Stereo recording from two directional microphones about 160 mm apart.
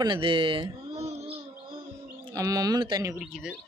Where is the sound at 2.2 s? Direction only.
20° right (ahead or behind).